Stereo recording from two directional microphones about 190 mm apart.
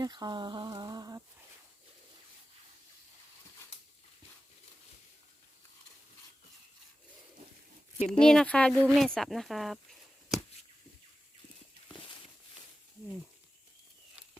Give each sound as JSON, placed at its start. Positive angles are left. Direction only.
{"t": 0.0, "sound": "speech", "side_deg": -20}
{"t": 7.9, "sound": "speech", "side_deg": 35}
{"t": 8.2, "sound": "speech", "side_deg": 5}